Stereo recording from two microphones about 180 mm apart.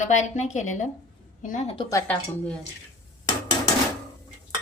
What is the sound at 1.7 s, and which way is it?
Speech, 25° left (ahead or behind).